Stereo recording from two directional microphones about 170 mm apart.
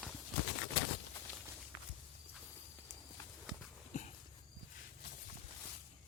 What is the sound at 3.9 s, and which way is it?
Horse, 40° left (ahead or behind).